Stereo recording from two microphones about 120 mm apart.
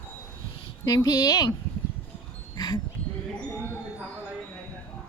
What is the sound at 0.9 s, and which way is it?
Speech, 30° left (ahead or behind).